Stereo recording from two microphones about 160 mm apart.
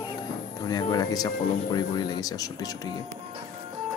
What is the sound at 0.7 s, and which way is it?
Speech, 25° left (ahead or behind).